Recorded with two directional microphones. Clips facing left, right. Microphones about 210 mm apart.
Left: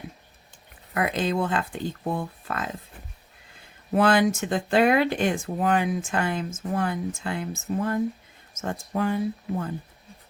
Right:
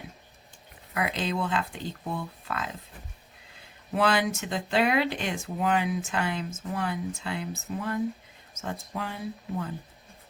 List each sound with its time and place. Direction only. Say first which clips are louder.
0.9 s speech: left 4 dB; 50° left (ahead or behind)
3.9 s speech: left 5 dB; 50° left (ahead or behind)